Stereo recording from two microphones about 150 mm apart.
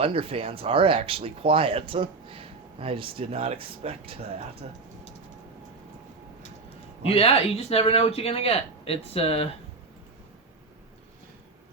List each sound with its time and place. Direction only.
0.0 s speech: 40° right (ahead or behind)
7.1 s a man's voice: 40° left (ahead or behind)